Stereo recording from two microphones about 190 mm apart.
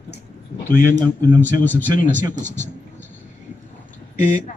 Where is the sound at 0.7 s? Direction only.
20° right (ahead or behind).